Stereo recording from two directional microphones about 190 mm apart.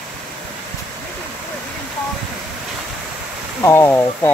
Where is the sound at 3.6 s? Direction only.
10° left (ahead or behind).